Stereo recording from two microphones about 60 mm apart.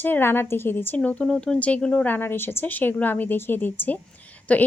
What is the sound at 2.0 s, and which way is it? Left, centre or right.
A woman's voice, left.